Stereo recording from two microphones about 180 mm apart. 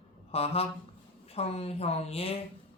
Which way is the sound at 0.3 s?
35° left (ahead or behind).